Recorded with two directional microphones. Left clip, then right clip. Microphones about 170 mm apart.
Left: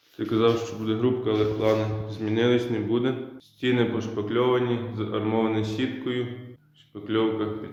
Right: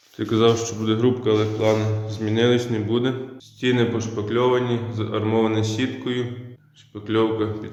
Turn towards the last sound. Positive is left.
turn(degrees=-15)  # may be behind; listen again after turning